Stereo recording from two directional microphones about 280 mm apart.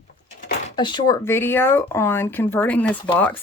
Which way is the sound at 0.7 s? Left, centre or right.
Centre.